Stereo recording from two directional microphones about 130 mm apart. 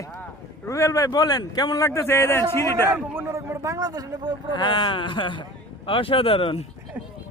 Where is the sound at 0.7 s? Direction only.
25° left (ahead or behind).